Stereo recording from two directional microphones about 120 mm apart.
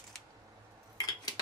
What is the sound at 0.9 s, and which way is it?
Dishes, 35° left (ahead or behind).